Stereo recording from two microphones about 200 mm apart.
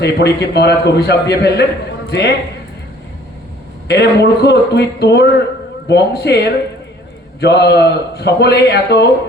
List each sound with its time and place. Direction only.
0.0 s a man's voice: 55° left (ahead or behind)
3.8 s a man's voice: 55° left (ahead or behind)